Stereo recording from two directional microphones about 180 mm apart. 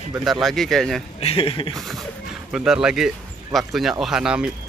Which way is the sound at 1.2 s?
30° left (ahead or behind).